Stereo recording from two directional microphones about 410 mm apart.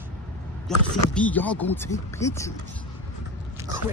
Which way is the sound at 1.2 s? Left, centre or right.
Centre.